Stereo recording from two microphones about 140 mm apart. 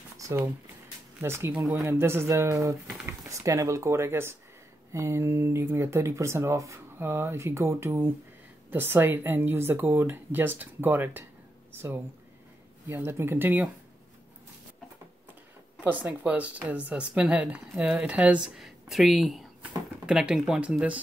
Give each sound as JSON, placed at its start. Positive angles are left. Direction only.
{"t": 0.2, "sound": "a sound", "side_deg": -20}
{"t": 1.2, "sound": "a woman's voice", "side_deg": -15}
{"t": 15.8, "sound": "a woman's voice", "side_deg": -10}